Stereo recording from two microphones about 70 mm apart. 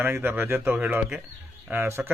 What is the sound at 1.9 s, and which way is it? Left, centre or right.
Speech, right.